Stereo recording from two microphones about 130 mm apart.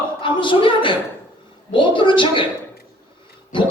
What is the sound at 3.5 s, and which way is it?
Speech, 40° left (ahead or behind).